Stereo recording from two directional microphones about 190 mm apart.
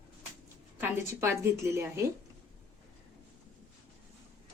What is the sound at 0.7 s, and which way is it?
A woman's voice, 10° right (ahead or behind).